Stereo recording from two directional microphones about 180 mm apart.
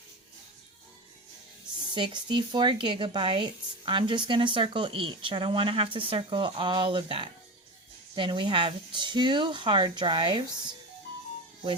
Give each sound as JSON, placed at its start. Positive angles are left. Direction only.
{"t": 1.9, "sound": "speech", "side_deg": -25}